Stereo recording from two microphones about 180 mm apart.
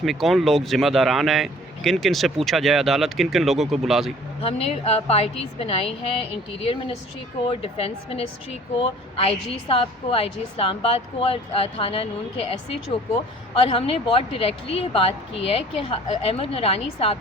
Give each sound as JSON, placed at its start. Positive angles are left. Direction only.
{"t": 0.0, "sound": "speech", "side_deg": 0}
{"t": 4.4, "sound": "speech", "side_deg": 35}
{"t": 13.6, "sound": "speech", "side_deg": 30}